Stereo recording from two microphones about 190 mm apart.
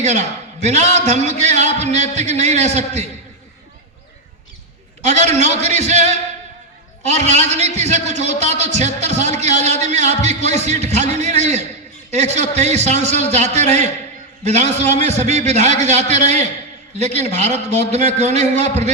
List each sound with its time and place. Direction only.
0.0 s a man's voice: 35° right (ahead or behind)
5.0 s a man's voice: 35° right (ahead or behind)